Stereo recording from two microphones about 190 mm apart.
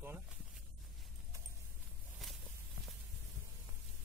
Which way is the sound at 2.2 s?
Centre (ahead or behind).